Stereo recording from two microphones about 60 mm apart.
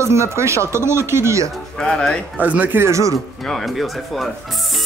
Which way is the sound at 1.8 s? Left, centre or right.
Centre.